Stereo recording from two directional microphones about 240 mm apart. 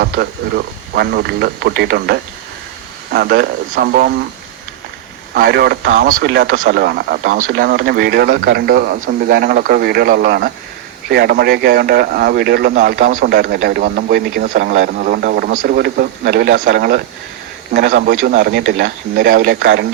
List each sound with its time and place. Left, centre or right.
0.0 s speech: right
5.3 s speech: right